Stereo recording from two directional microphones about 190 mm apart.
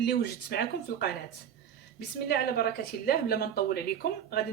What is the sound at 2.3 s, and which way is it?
Speech, 55° left (ahead or behind).